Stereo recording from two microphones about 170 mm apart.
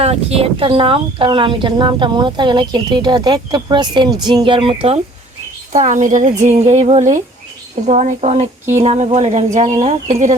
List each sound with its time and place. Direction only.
0.0 s speech: 35° right (ahead or behind)
5.7 s a woman's voice: 45° right (ahead or behind)